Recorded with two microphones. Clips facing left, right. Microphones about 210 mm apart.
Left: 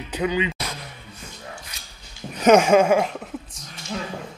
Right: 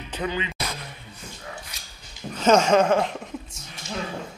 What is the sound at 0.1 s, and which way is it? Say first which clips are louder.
Speech: left 5 dB; 15° left (ahead or behind).